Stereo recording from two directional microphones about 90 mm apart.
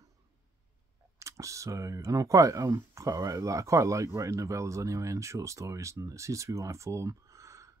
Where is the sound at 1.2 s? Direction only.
35° right (ahead or behind).